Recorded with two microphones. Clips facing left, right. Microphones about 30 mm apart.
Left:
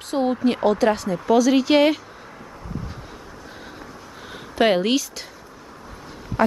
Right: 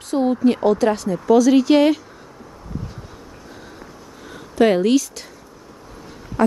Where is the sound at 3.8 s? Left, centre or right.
Left.